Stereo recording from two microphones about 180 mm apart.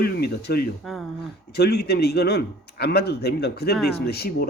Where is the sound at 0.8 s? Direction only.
Centre (ahead or behind).